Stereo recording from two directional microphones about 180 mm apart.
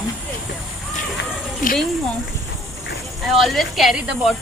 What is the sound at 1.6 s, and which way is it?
Speech, 45° left (ahead or behind).